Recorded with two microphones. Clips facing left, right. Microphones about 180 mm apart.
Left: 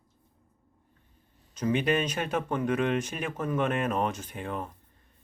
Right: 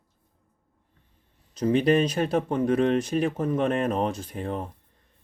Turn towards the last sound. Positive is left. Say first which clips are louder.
# right 4 dB
turn(degrees=-35)  # may be behind; listen again after turning